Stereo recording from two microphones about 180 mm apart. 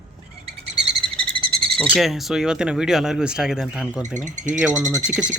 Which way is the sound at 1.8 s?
Centre (ahead or behind).